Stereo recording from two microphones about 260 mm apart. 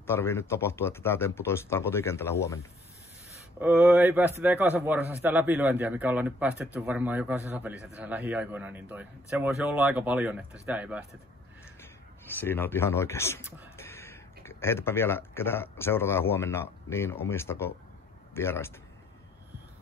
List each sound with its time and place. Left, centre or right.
0.0 s speech: centre
3.5 s a man's voice: centre
12.4 s speech: centre